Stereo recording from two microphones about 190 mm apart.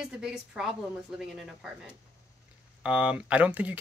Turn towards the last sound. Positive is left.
turn(degrees=-10)  # may be behind; listen again after turning